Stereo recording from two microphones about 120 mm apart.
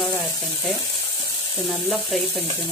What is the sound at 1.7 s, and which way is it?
Speech, 5° left (ahead or behind).